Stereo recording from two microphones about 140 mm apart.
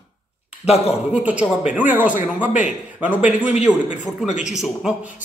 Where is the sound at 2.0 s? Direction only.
65° left (ahead or behind).